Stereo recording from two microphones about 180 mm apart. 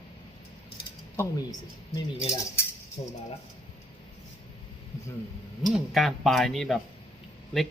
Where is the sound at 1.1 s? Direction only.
15° left (ahead or behind).